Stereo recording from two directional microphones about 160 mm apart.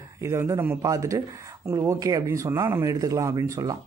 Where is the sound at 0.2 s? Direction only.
15° right (ahead or behind).